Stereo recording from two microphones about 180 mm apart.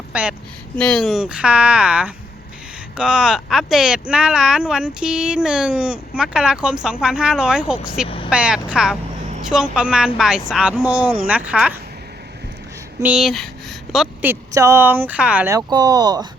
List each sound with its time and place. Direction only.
0.1 s a woman's voice: 5° right (ahead or behind)
8.0 s vehicle: 30° left (ahead or behind)
8.3 s speech: 5° right (ahead or behind)
13.0 s speech: 5° right (ahead or behind)
15.5 s speech: 20° right (ahead or behind)